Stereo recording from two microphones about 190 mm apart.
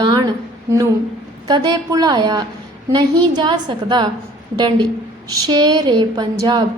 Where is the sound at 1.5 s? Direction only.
20° right (ahead or behind).